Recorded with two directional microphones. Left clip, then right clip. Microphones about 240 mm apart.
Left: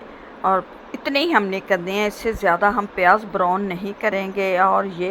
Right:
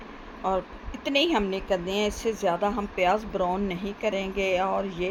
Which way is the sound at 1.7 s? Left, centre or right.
Left.